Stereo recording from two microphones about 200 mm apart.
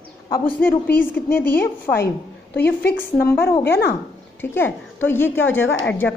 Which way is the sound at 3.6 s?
55° left (ahead or behind).